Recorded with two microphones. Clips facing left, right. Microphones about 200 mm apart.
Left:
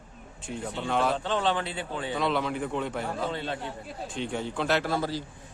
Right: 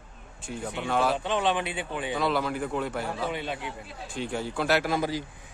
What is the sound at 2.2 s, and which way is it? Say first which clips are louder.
A man's voice: even; 5° right (ahead or behind).